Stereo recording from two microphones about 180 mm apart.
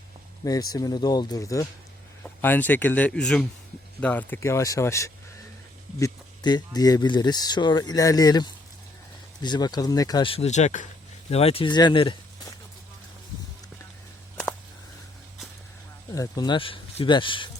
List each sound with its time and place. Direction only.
0.4 s speech: 20° left (ahead or behind)
16.1 s speech: 20° left (ahead or behind)